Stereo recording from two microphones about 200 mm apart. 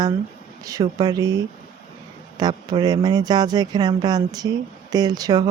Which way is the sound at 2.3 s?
20° right (ahead or behind).